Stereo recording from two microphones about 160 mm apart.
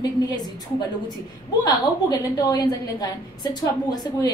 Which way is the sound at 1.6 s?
25° left (ahead or behind).